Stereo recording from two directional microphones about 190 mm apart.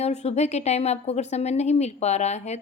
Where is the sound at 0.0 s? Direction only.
35° left (ahead or behind).